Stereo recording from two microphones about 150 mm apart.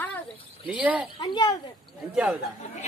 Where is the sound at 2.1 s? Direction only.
10° right (ahead or behind).